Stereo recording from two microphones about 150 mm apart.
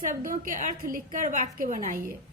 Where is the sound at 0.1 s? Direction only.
65° right (ahead or behind).